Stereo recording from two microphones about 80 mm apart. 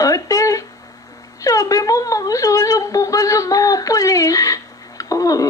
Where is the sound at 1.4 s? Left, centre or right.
Left.